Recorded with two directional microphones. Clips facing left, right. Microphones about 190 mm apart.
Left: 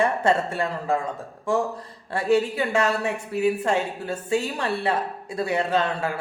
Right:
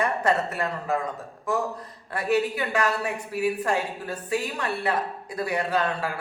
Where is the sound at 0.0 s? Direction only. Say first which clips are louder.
Left 3 dB; 25° left (ahead or behind).